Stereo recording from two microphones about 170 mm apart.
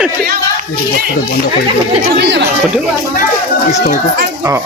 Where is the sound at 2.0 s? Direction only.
80° right.